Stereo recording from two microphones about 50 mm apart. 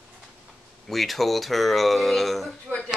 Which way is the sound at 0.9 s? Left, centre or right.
Centre.